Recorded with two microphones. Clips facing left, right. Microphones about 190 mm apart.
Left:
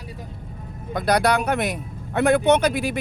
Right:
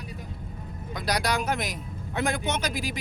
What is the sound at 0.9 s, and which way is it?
Speech, 55° left (ahead or behind).